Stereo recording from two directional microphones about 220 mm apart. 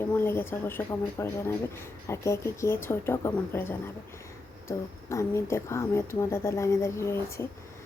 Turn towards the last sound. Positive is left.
turn(degrees=10)  # may be behind; listen again after turning